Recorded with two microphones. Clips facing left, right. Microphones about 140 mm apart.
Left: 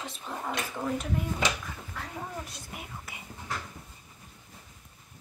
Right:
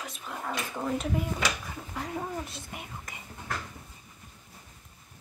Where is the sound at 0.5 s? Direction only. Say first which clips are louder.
Right 1 dB; centre (ahead or behind).